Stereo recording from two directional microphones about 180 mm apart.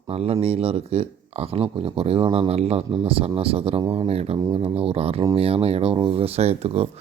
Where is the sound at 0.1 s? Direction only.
35° right (ahead or behind).